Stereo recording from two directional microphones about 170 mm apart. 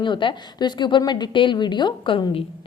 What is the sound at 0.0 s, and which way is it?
A woman's voice, 30° left (ahead or behind).